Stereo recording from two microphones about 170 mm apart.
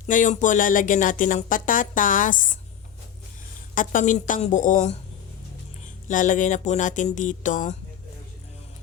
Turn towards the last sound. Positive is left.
turn(degrees=50)  # may be behind; listen again after turning